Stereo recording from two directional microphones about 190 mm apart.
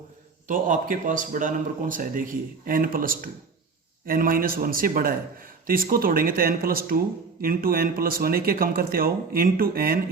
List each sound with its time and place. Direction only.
0.4 s a man's voice: 45° right (ahead or behind)